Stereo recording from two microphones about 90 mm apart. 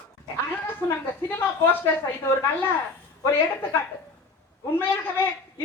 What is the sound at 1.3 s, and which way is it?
Speech, 20° left (ahead or behind).